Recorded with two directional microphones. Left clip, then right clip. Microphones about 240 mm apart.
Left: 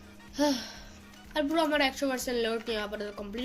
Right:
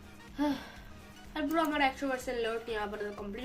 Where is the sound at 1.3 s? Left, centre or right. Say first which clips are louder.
Left 4 dB; left.